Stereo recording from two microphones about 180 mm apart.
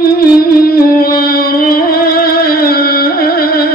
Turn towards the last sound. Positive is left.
turn(degrees=55)  # may be behind; listen again after turning